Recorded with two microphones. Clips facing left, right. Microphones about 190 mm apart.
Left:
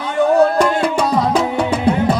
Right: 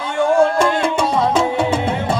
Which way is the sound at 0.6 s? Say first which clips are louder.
Left 1 dB; 25° right (ahead or behind).